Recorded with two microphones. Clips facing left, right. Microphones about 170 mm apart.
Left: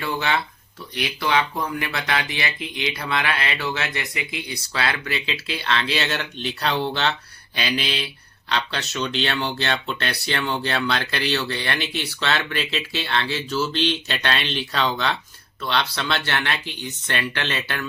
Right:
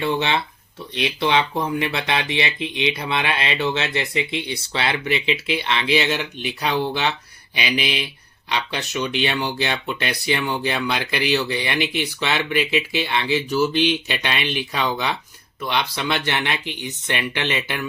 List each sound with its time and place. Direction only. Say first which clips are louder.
0.0 s speech: right 3 dB; 25° right (ahead or behind)